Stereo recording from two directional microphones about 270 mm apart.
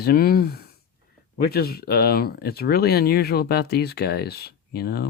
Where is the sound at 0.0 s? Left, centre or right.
Left.